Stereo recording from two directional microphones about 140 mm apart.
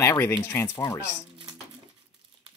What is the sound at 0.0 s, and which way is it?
Speech, 20° left (ahead or behind).